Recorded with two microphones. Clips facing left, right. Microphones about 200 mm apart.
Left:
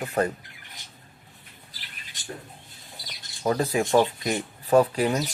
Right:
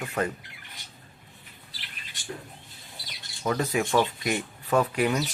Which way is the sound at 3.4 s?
35° left (ahead or behind).